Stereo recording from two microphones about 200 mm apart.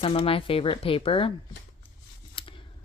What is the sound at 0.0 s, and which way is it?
Speech, 25° left (ahead or behind).